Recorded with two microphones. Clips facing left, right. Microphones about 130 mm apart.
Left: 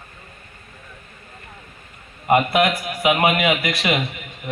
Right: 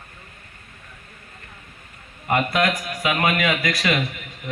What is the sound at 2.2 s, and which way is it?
A man's voice, 20° left (ahead or behind).